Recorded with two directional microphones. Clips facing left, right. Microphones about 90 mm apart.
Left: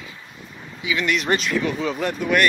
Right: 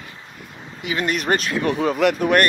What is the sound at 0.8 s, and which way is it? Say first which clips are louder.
Speech: even; 45° right (ahead or behind).